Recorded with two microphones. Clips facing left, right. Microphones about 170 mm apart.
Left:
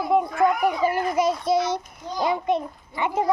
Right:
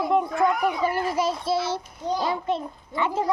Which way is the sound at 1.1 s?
30° right (ahead or behind).